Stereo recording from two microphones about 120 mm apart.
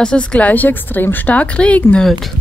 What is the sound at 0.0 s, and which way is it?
A woman's voice, 10° left (ahead or behind).